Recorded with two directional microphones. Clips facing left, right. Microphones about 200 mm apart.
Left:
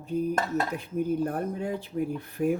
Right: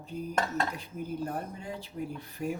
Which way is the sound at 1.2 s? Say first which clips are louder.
Left 7 dB; 55° left (ahead or behind).